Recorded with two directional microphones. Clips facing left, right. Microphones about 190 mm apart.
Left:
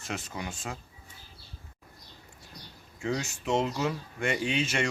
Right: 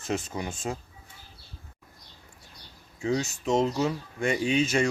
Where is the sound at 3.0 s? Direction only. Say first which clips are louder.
Right 4 dB; 5° right (ahead or behind).